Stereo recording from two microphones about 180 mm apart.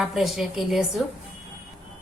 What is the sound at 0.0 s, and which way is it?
A woman's voice, centre (ahead or behind).